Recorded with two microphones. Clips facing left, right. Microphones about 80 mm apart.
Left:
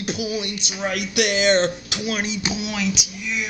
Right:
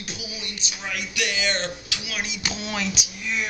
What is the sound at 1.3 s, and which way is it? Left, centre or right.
Speech, left.